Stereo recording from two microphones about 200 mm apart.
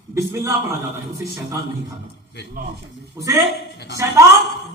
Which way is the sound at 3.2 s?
15° right (ahead or behind).